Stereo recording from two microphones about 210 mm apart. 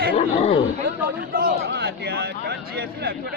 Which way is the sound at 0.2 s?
30° left (ahead or behind).